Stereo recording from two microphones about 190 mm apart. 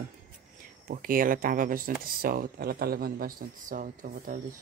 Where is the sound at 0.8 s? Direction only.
50° right (ahead or behind).